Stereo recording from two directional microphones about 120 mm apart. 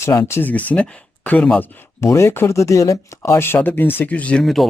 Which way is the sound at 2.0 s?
25° left (ahead or behind).